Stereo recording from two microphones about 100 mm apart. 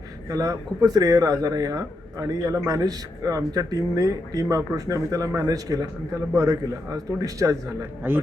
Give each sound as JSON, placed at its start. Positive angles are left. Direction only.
{"t": 0.3, "sound": "a man's voice", "side_deg": -35}
{"t": 8.0, "sound": "a man's voice", "side_deg": -20}